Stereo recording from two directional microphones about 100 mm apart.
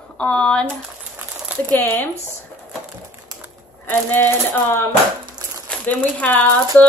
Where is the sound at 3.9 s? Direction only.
20° left (ahead or behind).